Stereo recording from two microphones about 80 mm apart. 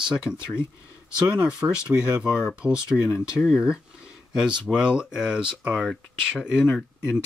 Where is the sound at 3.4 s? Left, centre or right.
Centre.